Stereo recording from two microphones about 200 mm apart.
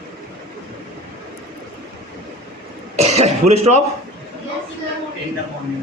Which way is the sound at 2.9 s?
35° right (ahead or behind).